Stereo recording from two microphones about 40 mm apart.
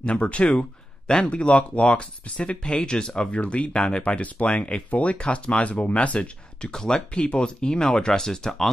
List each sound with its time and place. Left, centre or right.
0.0 s speech: left
4.2 s speech: left
6.7 s speech: centre
7.2 s speech: left